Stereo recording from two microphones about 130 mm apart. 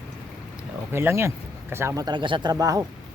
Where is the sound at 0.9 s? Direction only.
20° right (ahead or behind).